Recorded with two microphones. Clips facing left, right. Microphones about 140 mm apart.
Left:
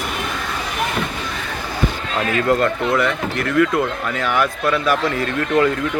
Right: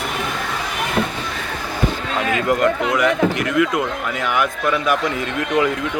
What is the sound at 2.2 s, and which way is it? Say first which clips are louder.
Speech: left 1 dB; 15° right (ahead or behind).